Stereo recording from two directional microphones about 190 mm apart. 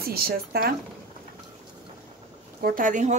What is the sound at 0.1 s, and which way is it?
Speech, 55° right (ahead or behind).